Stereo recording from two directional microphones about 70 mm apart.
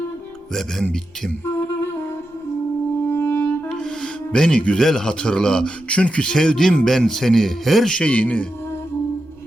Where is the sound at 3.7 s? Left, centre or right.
Centre.